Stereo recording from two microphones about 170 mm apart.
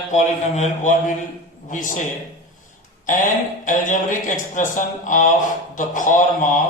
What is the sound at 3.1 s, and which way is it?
Speech, 50° left (ahead or behind).